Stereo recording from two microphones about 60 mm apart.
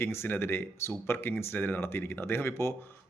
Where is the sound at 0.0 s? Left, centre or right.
Left.